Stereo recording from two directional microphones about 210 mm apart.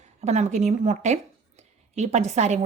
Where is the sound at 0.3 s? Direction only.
30° right (ahead or behind).